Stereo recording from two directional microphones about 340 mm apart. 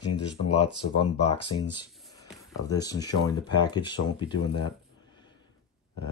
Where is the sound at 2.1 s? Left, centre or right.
Centre.